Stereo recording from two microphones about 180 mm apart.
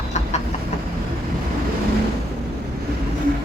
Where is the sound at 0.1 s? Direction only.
40° left (ahead or behind).